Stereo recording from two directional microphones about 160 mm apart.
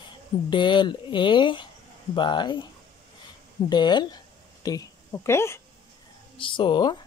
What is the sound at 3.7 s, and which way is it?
Speech, 25° left (ahead or behind).